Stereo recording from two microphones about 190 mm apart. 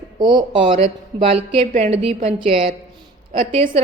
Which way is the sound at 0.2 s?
25° right (ahead or behind).